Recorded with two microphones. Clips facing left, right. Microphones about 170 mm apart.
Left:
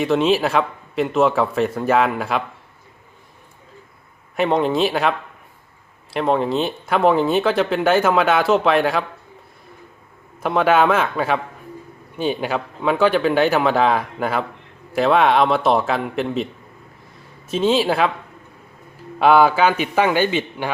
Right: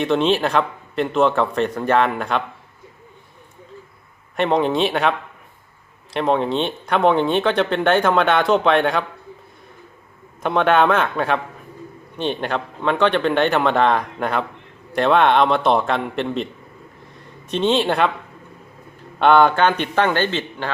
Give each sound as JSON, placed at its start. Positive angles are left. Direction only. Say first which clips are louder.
{"t": 0.0, "sound": "speech", "louder": "left 1 dB", "side_deg": 5}
{"t": 4.4, "sound": "speech", "louder": "even", "side_deg": 0}
{"t": 10.4, "sound": "speech", "louder": "even", "side_deg": 0}
{"t": 19.2, "sound": "a man's voice", "louder": "even", "side_deg": 5}